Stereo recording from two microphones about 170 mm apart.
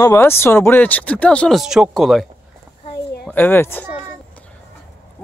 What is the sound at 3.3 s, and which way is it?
Speech, 10° left (ahead or behind).